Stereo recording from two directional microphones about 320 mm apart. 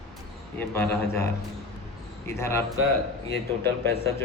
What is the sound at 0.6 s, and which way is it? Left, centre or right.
Speech, centre.